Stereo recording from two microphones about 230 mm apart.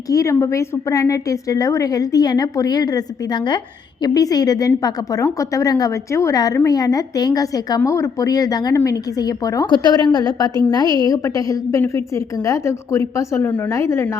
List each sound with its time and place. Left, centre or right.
0.1 s a woman's voice: centre